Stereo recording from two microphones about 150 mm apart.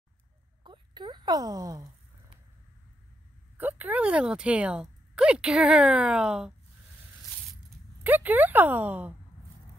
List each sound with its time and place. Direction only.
0.7 s a sound: 30° right (ahead or behind)
3.5 s a woman's voice: 10° right (ahead or behind)
8.0 s a woman's voice: 10° right (ahead or behind)